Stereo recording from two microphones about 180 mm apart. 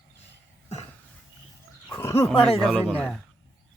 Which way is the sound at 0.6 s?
35° left (ahead or behind).